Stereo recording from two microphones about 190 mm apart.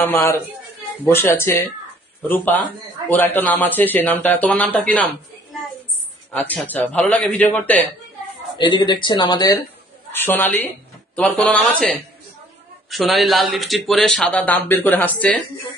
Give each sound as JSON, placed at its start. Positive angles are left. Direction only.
{"t": 0.0, "sound": "speech", "side_deg": 10}
{"t": 6.5, "sound": "speech", "side_deg": 10}
{"t": 8.5, "sound": "speech", "side_deg": 25}
{"t": 10.1, "sound": "speech", "side_deg": 10}